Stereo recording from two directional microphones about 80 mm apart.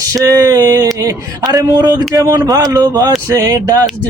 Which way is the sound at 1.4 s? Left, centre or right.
Right.